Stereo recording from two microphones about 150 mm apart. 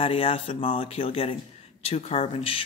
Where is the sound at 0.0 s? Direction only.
40° left (ahead or behind).